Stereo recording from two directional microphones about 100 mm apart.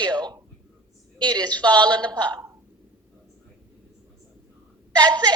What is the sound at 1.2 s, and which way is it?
A woman's voice, 10° left (ahead or behind).